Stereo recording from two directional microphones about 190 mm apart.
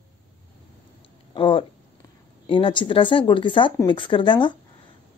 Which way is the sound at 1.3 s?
25° left (ahead or behind).